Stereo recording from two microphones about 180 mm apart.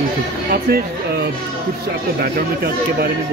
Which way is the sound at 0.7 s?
55° right (ahead or behind).